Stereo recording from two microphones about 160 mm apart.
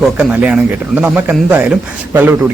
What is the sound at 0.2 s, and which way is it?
Speech, 10° right (ahead or behind).